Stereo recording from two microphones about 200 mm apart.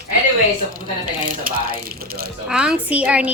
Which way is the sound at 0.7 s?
45° right (ahead or behind).